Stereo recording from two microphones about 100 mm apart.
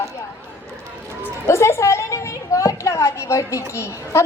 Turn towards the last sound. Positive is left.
turn(degrees=30)  # may be behind; listen again after turning